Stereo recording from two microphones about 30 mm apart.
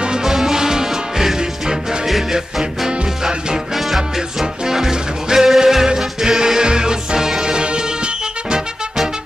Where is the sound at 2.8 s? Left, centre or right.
Right.